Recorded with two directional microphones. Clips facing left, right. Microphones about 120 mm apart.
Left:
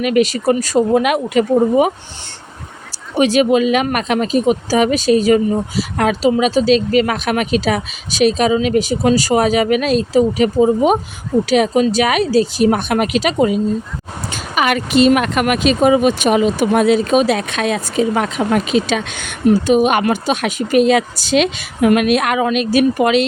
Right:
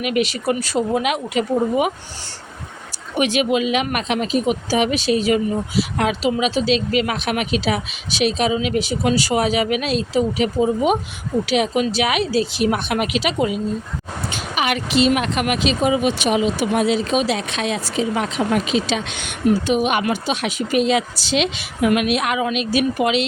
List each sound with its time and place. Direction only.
0.0 s speech: 40° left (ahead or behind)
3.2 s speech: 35° left (ahead or behind)